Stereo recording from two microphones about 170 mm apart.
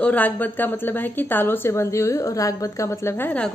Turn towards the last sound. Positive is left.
turn(degrees=10)  # may be behind; listen again after turning